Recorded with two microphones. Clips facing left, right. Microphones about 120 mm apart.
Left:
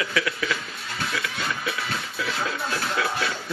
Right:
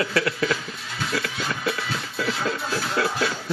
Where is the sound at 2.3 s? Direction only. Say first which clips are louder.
Right 2 dB; centre (ahead or behind).